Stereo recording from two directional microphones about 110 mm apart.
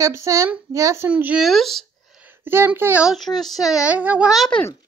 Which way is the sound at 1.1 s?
10° right (ahead or behind).